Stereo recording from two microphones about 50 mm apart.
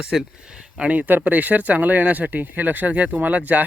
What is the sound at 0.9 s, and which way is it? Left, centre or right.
Speech, right.